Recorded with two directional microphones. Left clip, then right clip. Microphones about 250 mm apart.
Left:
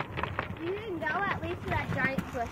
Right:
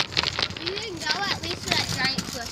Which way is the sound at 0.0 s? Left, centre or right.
Right.